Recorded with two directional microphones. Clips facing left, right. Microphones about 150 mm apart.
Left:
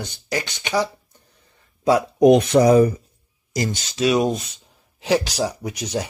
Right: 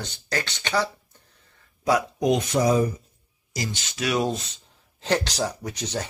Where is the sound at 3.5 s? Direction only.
50° left (ahead or behind).